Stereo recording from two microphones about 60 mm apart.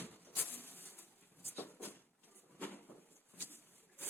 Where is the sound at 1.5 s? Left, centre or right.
Left.